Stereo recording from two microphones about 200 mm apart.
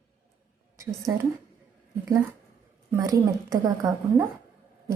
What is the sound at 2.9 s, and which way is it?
Speech, 15° right (ahead or behind).